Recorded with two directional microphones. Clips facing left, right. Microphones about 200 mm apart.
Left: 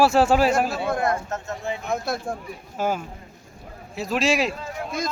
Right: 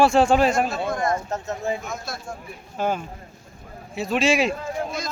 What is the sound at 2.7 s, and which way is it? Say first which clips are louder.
A man's voice: even; 5° left (ahead or behind).